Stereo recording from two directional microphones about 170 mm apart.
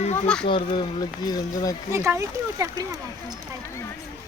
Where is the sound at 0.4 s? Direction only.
30° left (ahead or behind).